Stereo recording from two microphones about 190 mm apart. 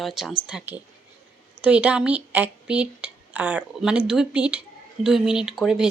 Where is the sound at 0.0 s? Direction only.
Centre (ahead or behind).